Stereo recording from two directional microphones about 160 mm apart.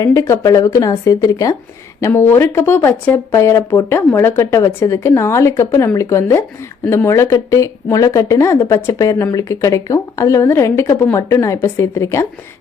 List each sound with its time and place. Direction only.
0.0 s speech: 20° left (ahead or behind)